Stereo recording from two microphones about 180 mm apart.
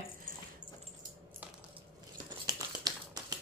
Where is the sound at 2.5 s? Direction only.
20° right (ahead or behind).